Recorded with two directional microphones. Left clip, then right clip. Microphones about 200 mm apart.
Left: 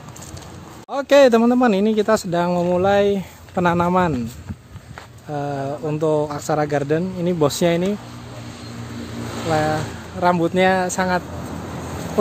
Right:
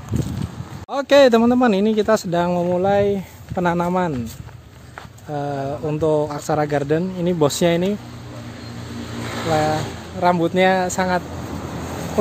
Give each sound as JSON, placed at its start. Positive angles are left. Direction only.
{"t": 0.8, "sound": "a man's voice", "side_deg": -5}
{"t": 5.3, "sound": "a man's voice", "side_deg": 5}
{"t": 9.5, "sound": "a man's voice", "side_deg": 5}
{"t": 11.6, "sound": "vehicle", "side_deg": -45}